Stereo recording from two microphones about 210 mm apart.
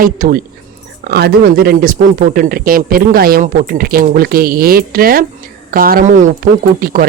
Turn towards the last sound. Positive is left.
turn(degrees=-45)  # may be behind; listen again after turning